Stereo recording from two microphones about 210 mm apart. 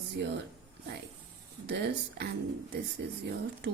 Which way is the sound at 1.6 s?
50° right (ahead or behind).